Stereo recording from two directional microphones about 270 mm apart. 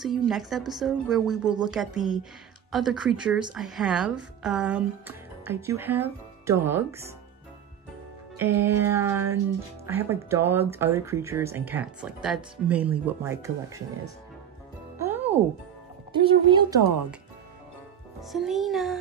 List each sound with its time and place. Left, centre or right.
0.0 s a woman's voice: centre
8.4 s a woman's voice: centre
15.0 s music: centre
16.1 s a woman's voice: centre
18.2 s a woman's voice: centre